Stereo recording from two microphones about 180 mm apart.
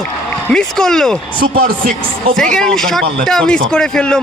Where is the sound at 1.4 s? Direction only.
55° right (ahead or behind).